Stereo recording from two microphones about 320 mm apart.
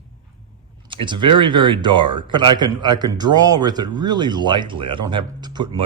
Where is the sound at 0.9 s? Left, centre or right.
Centre.